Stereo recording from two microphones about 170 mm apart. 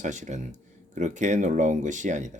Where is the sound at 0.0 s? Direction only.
45° right (ahead or behind).